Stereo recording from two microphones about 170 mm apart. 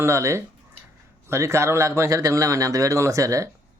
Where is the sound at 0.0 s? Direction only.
15° right (ahead or behind).